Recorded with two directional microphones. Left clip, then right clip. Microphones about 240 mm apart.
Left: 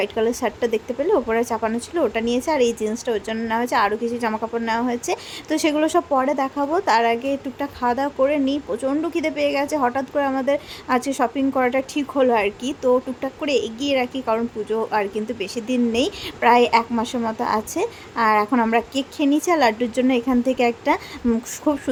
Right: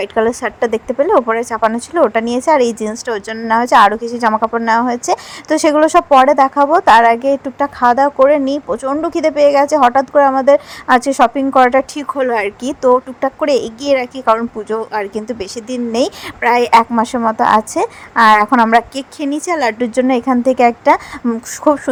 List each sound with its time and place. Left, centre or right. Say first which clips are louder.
0.0 s speech: right 6 dB; centre